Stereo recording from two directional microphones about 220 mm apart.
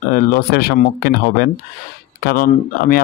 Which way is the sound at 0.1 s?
45° left (ahead or behind).